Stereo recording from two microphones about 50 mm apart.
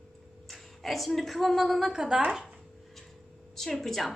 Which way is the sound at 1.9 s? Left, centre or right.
Centre.